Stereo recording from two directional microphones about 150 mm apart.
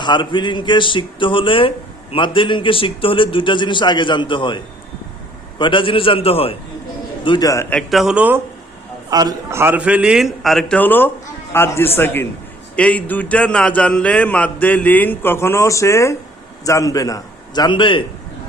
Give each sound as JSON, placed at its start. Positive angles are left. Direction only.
{"t": 0.0, "sound": "a man's voice", "side_deg": 30}
{"t": 7.3, "sound": "a man's voice", "side_deg": 25}
{"t": 7.7, "sound": "a man's voice", "side_deg": 0}
{"t": 9.0, "sound": "a man's voice", "side_deg": -25}